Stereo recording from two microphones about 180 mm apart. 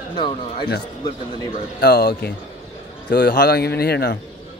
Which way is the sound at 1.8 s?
60° left (ahead or behind).